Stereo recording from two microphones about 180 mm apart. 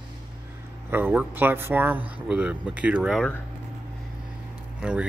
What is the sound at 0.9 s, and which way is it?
Speech, 10° right (ahead or behind).